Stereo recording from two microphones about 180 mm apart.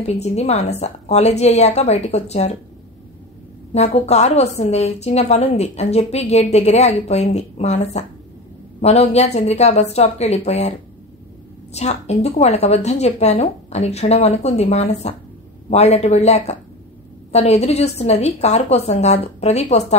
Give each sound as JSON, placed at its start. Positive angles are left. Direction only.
{"t": 0.0, "sound": "a woman's voice", "side_deg": 35}
{"t": 3.7, "sound": "a woman's voice", "side_deg": 35}
{"t": 11.7, "sound": "a woman's voice", "side_deg": 35}